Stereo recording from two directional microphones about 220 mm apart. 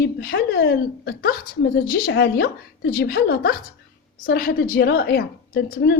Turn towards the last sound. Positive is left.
turn(degrees=45)  # may be behind; listen again after turning